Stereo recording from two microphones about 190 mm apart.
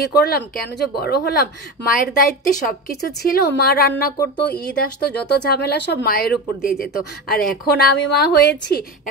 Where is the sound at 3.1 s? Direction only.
55° left (ahead or behind).